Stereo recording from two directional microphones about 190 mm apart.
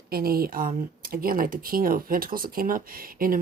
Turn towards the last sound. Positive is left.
turn(degrees=-50)  # may be behind; listen again after turning